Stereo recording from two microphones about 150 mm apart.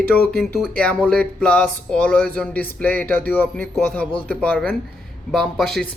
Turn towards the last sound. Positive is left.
turn(degrees=5)  # may be behind; listen again after turning